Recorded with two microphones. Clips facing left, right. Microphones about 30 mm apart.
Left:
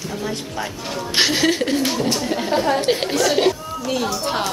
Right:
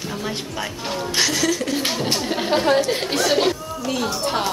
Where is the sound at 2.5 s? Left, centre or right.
Right.